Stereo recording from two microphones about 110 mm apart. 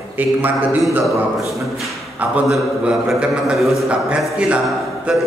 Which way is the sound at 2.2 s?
5° right (ahead or behind).